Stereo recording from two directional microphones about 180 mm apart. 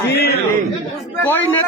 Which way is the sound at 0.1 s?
65° left (ahead or behind).